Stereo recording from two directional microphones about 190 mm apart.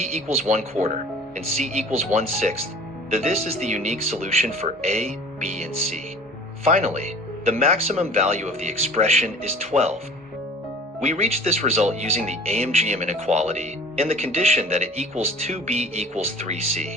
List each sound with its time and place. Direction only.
0.0 s speech: 35° right (ahead or behind)
6.7 s speech: 35° right (ahead or behind)
11.0 s speech: 35° right (ahead or behind)